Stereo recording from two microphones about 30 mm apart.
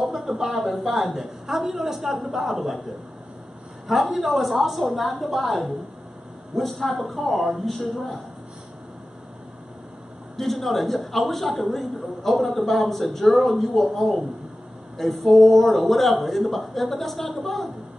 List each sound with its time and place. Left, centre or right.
0.0 s a sound: centre
0.5 s a woman's voice: centre
3.8 s a man's voice: centre
6.7 s a man's voice: centre
10.3 s a man's voice: centre